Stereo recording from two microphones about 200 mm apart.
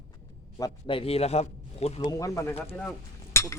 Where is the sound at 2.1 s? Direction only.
15° left (ahead or behind).